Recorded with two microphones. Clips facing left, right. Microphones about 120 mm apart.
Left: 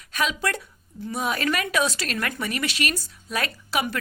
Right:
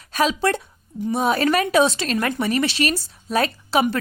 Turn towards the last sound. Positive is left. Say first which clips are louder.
# right 7 dB
turn(degrees=-30)  # may be behind; listen again after turning